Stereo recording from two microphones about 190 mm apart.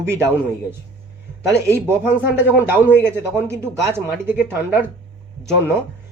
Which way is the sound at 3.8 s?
10° right (ahead or behind).